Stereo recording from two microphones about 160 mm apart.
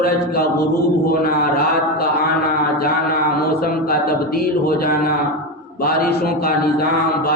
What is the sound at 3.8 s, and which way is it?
Mantra, 70° left (ahead or behind).